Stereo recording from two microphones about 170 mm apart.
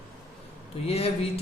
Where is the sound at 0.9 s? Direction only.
35° left (ahead or behind).